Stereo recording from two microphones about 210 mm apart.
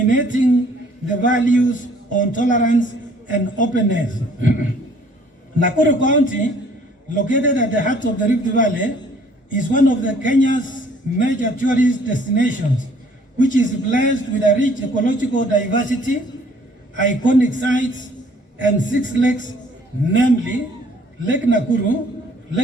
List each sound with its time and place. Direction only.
0.1 s a man's voice: 40° left (ahead or behind)
5.6 s a man's voice: 40° left (ahead or behind)
18.6 s a man's voice: 40° left (ahead or behind)